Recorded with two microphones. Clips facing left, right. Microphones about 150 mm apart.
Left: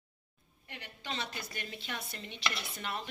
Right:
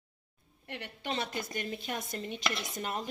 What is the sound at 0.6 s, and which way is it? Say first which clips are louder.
A woman's voice: right 5 dB; 60° right (ahead or behind).